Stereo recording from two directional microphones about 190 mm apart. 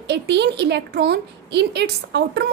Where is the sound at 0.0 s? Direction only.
65° right (ahead or behind).